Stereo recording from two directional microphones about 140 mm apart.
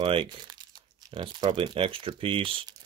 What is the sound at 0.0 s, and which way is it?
Speech, 40° right (ahead or behind).